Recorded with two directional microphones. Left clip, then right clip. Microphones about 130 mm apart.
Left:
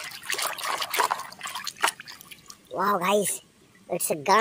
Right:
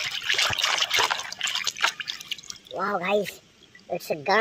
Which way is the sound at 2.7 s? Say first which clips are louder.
Left 2 dB; 15° left (ahead or behind).